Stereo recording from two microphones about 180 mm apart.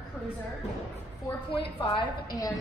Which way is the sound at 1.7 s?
30° left (ahead or behind).